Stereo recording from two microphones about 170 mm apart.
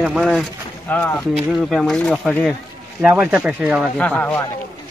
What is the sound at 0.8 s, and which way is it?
Speech, 10° left (ahead or behind).